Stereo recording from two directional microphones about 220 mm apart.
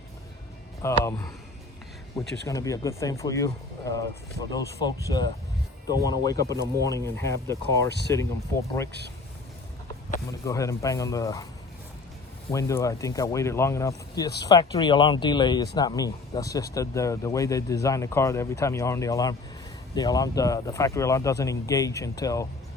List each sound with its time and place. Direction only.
1.0 s speech: 15° left (ahead or behind)
10.4 s speech: 15° left (ahead or behind)
12.5 s speech: 15° left (ahead or behind)